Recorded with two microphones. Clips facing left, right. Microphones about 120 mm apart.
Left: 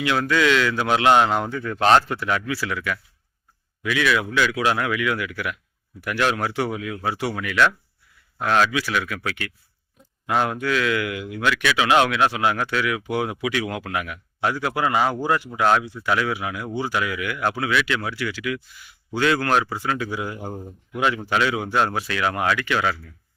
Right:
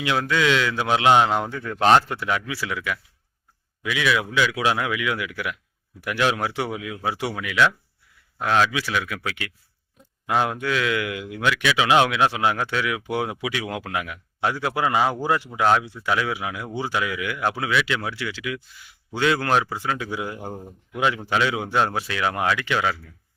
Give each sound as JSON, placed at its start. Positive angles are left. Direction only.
{"t": 0.0, "sound": "speech", "side_deg": -20}